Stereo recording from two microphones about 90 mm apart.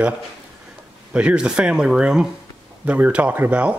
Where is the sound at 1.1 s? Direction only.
10° right (ahead or behind).